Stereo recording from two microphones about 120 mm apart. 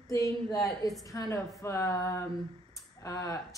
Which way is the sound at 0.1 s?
30° left (ahead or behind).